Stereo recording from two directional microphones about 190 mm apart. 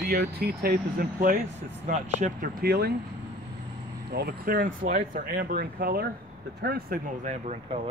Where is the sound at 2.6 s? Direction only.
55° right (ahead or behind).